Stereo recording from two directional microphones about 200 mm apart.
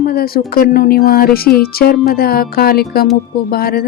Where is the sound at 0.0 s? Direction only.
50° left (ahead or behind).